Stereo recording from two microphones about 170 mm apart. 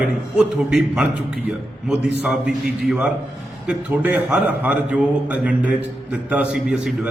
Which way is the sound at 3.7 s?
5° right (ahead or behind).